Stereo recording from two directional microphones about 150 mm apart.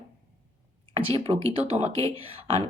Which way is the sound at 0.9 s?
40° right (ahead or behind).